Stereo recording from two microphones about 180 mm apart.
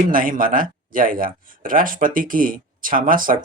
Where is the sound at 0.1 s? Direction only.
50° right (ahead or behind).